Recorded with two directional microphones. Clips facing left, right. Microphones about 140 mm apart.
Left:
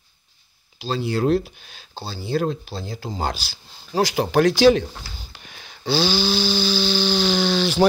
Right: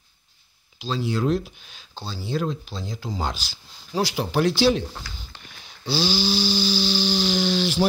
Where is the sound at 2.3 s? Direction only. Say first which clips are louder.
Left 4 dB; 55° left (ahead or behind).